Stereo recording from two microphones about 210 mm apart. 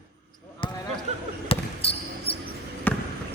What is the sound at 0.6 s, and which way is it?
Basketball bounce, 25° left (ahead or behind).